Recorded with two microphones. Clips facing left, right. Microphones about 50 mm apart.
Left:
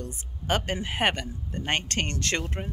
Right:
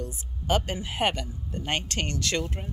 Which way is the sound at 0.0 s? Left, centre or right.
Left.